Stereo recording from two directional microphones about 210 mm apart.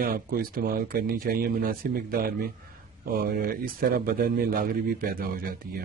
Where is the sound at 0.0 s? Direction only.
45° right (ahead or behind).